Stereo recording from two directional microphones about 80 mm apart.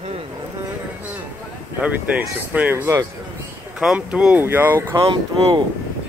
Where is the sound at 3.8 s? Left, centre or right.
Centre.